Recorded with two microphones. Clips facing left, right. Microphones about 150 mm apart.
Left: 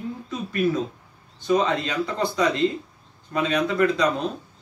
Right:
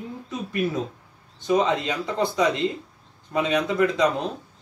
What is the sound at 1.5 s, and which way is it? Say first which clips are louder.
Speech: even; 15° right (ahead or behind).